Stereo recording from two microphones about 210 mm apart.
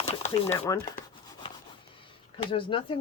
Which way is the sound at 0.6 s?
15° left (ahead or behind).